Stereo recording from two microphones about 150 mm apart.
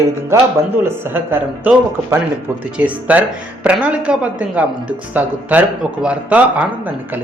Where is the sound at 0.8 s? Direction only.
15° right (ahead or behind).